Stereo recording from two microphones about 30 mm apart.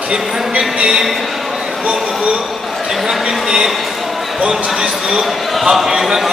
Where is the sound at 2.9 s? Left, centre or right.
Centre.